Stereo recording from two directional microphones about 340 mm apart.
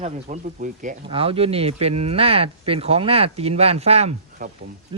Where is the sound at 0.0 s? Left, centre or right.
Right.